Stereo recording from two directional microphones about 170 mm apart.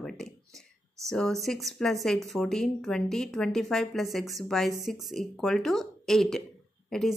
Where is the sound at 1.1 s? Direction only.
5° left (ahead or behind).